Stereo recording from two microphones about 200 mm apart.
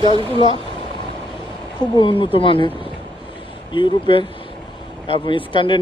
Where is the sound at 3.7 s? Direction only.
25° left (ahead or behind).